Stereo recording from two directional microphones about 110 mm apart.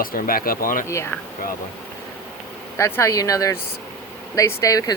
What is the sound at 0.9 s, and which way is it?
Speech, 25° left (ahead or behind).